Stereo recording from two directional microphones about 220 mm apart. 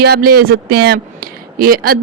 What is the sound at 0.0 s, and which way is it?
A man's voice, 45° right (ahead or behind).